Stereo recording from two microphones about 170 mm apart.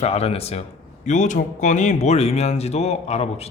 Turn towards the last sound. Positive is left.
turn(degrees=40)  # may be behind; listen again after turning